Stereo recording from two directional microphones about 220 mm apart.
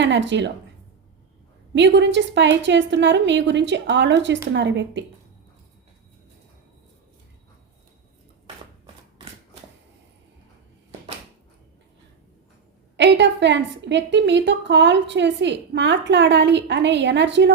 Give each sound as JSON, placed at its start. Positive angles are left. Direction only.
{"t": 0.0, "sound": "a woman's voice", "side_deg": -55}
{"t": 1.7, "sound": "a woman's voice", "side_deg": -55}
{"t": 13.0, "sound": "a woman's voice", "side_deg": -55}